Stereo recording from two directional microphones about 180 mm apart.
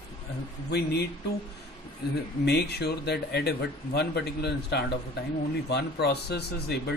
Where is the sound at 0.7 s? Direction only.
65° left (ahead or behind).